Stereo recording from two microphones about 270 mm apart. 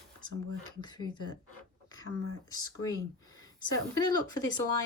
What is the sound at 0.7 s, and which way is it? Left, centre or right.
Speech, centre.